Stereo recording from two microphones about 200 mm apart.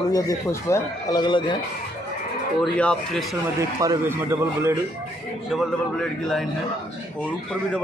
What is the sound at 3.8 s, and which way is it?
Speech, 15° right (ahead or behind).